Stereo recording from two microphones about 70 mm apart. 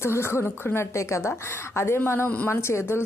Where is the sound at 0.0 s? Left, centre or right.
Left.